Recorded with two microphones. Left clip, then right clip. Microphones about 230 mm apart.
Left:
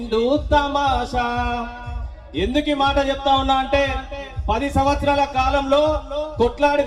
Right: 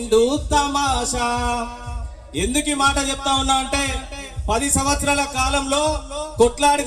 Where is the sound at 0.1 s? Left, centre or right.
Right.